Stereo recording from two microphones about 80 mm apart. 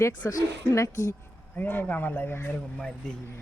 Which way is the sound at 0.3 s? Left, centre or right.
Left.